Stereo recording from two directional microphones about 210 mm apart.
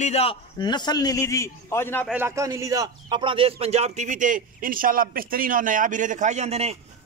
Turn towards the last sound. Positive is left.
turn(degrees=-30)  # may be behind; listen again after turning